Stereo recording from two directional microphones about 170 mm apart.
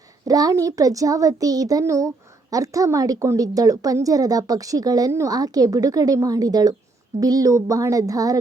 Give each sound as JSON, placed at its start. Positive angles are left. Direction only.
{"t": 0.3, "sound": "a woman's voice", "side_deg": -20}